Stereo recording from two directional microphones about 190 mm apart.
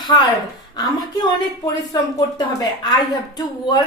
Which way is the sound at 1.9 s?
20° left (ahead or behind).